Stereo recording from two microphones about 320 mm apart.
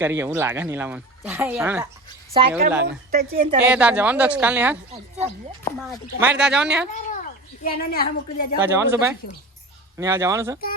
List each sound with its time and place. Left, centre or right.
0.0 s speech: centre
3.1 s a woman's voice: right
3.6 s a woman's voice: centre
6.9 s a woman's voice: left
8.6 s speech: centre